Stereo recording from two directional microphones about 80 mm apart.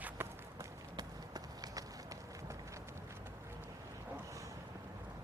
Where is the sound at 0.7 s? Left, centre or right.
Right.